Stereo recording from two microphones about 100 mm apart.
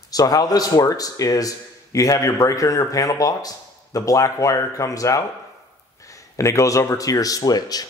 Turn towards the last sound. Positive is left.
turn(degrees=40)  # may be behind; listen again after turning